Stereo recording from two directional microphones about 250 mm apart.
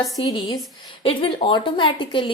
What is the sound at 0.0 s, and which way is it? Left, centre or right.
A woman's voice, centre.